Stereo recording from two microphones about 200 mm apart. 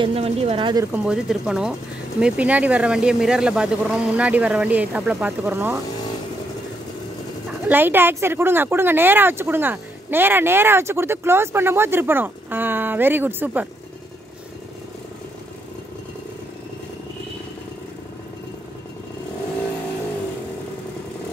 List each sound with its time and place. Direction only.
0.0 s speech: 30° right (ahead or behind)
0.9 s speech: 5° right (ahead or behind)
7.6 s speech: 10° right (ahead or behind)